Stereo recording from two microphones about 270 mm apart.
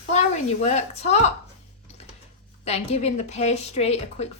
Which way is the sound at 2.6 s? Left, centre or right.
Left.